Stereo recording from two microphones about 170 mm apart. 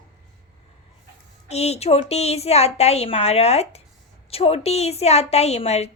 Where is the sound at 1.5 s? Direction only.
40° left (ahead or behind).